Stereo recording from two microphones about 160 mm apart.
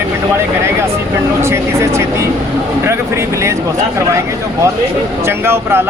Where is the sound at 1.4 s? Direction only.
15° right (ahead or behind).